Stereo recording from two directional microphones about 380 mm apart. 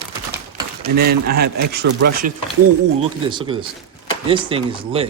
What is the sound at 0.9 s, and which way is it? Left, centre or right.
Speech, right.